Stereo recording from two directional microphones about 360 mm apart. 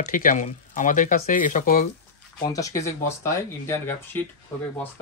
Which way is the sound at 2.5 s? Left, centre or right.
Centre.